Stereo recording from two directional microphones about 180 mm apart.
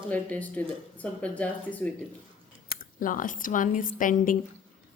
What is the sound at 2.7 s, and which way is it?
Speech, 50° left (ahead or behind).